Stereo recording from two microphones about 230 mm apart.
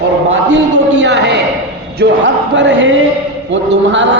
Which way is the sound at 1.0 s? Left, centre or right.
Right.